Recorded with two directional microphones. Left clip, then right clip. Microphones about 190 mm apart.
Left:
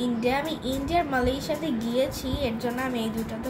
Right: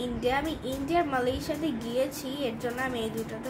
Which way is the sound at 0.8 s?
15° right (ahead or behind).